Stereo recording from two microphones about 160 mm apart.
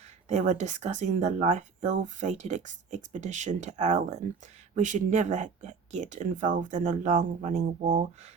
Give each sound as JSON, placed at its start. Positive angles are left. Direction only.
{"t": 0.3, "sound": "speech", "side_deg": -45}